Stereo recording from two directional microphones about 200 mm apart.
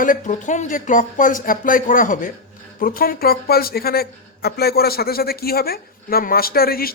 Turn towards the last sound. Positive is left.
turn(degrees=50)  # may be behind; listen again after turning